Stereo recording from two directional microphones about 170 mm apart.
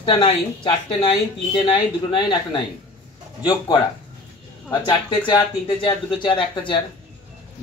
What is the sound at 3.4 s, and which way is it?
Speech, 25° left (ahead or behind).